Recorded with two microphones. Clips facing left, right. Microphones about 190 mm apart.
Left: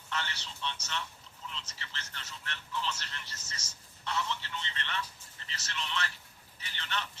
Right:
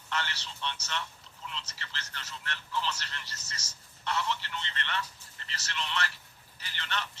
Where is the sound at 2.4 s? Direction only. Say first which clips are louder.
Right 3 dB; 65° right (ahead or behind).